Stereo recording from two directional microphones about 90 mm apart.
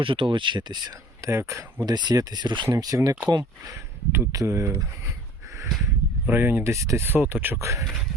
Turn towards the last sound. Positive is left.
turn(degrees=-35)  # may be behind; listen again after turning